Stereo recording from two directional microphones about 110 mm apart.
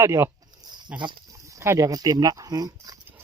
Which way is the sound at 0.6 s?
40° right (ahead or behind).